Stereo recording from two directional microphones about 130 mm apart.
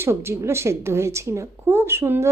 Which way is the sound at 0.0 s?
20° right (ahead or behind).